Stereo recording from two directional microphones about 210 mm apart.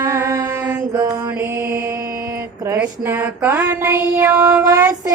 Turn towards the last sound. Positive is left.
turn(degrees=-15)  # may be behind; listen again after turning